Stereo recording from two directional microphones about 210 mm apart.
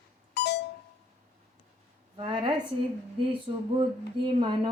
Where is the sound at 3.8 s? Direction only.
20° right (ahead or behind).